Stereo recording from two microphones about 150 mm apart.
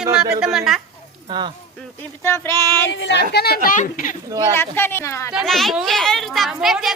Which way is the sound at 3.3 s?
90° left.